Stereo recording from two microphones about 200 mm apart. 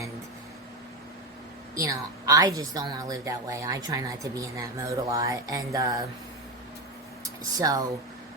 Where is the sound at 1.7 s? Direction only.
15° right (ahead or behind).